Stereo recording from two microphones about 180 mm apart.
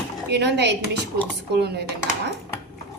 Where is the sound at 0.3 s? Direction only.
70° right (ahead or behind).